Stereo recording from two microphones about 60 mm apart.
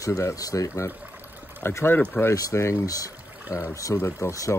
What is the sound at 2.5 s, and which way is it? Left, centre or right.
Speech, left.